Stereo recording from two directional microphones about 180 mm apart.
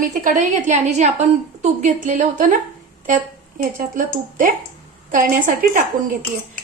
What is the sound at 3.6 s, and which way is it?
A woman's voice, 50° right (ahead or behind).